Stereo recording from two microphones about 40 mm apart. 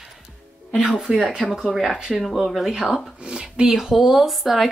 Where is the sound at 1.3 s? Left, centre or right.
Centre.